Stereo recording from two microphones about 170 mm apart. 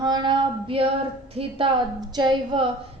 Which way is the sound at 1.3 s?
30° right (ahead or behind).